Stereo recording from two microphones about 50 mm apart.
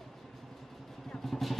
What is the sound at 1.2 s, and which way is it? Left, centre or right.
Vehicle, centre.